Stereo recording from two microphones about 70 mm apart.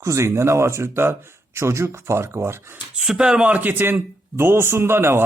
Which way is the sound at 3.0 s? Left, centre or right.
Centre.